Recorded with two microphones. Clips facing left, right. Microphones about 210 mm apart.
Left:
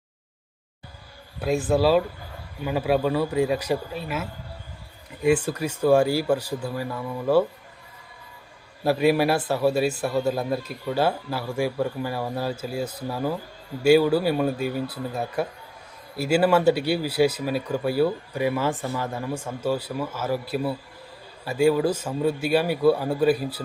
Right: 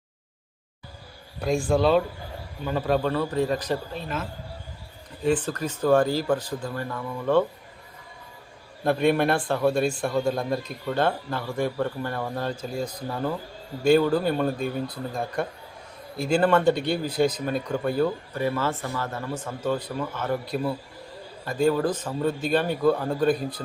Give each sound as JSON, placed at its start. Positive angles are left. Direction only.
{"t": 1.4, "sound": "speech", "side_deg": 5}
{"t": 8.8, "sound": "speech", "side_deg": 5}